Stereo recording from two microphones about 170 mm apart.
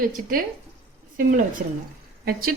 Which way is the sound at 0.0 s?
55° right (ahead or behind).